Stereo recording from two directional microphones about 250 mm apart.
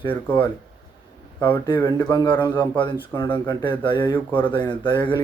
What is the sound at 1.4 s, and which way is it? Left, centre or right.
A man's voice, centre.